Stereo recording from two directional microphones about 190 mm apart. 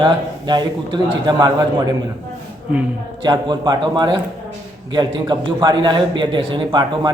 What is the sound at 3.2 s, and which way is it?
A man's voice, 20° right (ahead or behind).